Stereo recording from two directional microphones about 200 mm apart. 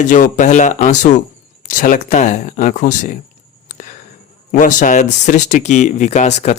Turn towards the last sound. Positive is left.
turn(degrees=35)  # may be behind; listen again after turning